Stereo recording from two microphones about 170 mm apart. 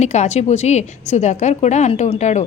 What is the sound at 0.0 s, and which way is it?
A woman's voice, 40° left (ahead or behind).